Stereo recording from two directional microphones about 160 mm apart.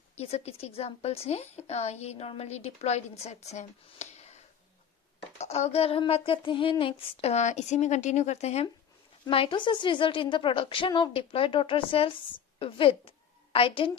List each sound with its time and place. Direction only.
0.1 s a woman's voice: 40° left (ahead or behind)
5.4 s a woman's voice: 40° left (ahead or behind)
9.2 s a woman's voice: 35° left (ahead or behind)